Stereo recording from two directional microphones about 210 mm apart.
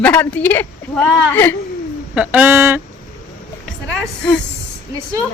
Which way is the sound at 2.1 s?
5° right (ahead or behind).